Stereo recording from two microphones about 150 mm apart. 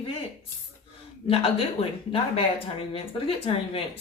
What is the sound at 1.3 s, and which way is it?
Speech, 40° left (ahead or behind).